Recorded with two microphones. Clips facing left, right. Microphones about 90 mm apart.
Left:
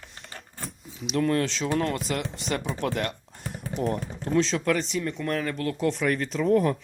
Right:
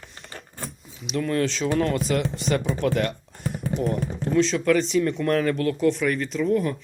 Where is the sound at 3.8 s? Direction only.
35° left (ahead or behind).